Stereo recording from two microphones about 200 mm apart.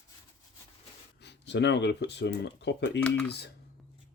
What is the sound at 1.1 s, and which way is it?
Speech, 60° left (ahead or behind).